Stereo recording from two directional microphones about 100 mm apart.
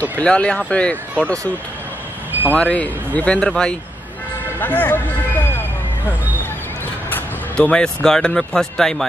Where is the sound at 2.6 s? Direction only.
15° left (ahead or behind).